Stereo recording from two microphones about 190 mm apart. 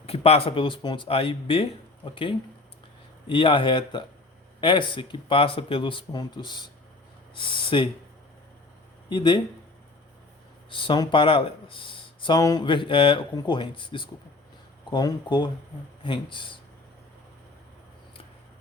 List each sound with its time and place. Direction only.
0.0 s speech: 30° left (ahead or behind)
3.2 s speech: 25° left (ahead or behind)
9.0 s speech: 25° left (ahead or behind)
10.7 s speech: 25° left (ahead or behind)